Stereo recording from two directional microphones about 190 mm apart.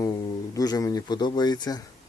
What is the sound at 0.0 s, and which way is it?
Speech, 20° left (ahead or behind).